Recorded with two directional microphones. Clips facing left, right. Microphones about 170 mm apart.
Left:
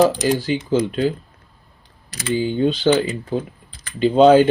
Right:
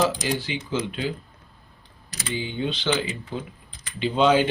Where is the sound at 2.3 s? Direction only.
45° left (ahead or behind).